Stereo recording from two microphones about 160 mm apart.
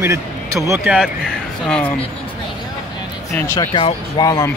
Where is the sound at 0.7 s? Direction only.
5° right (ahead or behind).